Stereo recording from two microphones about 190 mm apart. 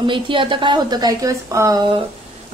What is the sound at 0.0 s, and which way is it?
A woman's voice, 25° right (ahead or behind).